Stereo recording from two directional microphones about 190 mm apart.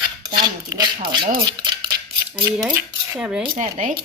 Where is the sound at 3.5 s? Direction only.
40° right (ahead or behind).